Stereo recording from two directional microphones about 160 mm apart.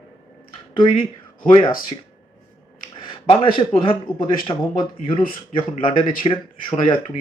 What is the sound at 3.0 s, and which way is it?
Speech, 30° left (ahead or behind).